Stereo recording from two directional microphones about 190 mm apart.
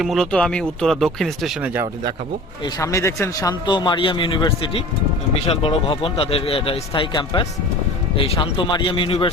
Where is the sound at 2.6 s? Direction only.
20° left (ahead or behind).